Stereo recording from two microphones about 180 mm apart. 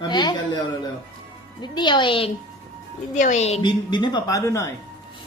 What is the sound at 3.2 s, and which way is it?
A woman's voice, 40° left (ahead or behind).